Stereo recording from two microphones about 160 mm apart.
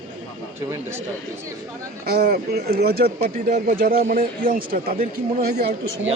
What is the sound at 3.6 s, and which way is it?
Speech, 65° right (ahead or behind).